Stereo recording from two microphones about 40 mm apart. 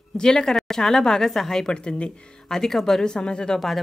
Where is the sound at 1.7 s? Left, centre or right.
Left.